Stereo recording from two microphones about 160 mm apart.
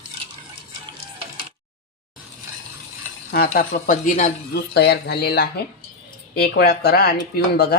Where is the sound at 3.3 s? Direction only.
65° left (ahead or behind); by 4.3 s 50° left (ahead or behind).